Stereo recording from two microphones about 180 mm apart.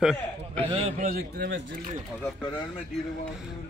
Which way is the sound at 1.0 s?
55° right (ahead or behind).